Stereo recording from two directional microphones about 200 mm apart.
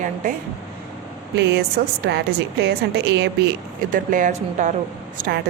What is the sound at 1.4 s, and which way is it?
A woman's voice, 60° right (ahead or behind).